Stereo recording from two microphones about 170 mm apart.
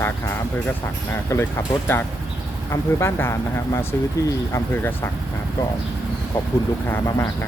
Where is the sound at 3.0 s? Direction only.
15° left (ahead or behind).